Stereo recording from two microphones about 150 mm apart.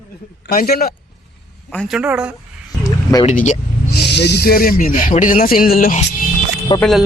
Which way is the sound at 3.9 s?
90° left.